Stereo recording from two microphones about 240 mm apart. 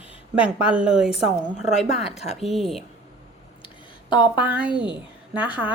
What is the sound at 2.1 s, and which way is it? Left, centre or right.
Speech, left.